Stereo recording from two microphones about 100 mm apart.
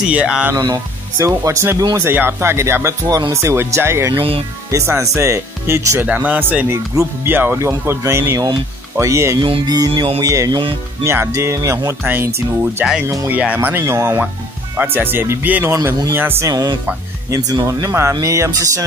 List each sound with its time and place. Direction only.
0.0 s speech: 10° right (ahead or behind)
1.1 s speech: 30° right (ahead or behind)
2.0 s speech: 20° right (ahead or behind)
4.1 s speech: 65° right (ahead or behind)
4.6 s speech: 30° right (ahead or behind)
6.0 s speech: 15° right (ahead or behind); by 9.4 s 30° right (ahead or behind)
9.7 s music: 45° right (ahead or behind)
10.2 s speech: 35° right (ahead or behind)
10.5 s speech: 55° right (ahead or behind)
11.1 s speech: 25° right (ahead or behind)
16.4 s speech: 40° right (ahead or behind)